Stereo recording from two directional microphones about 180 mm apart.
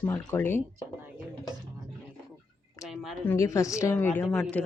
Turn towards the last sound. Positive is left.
turn(degrees=5)  # may be behind; listen again after turning